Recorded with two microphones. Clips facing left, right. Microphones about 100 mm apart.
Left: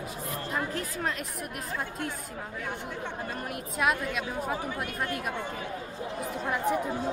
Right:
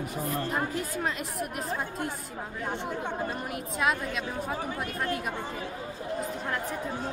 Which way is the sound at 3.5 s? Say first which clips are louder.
Left 2 dB; 5° left (ahead or behind).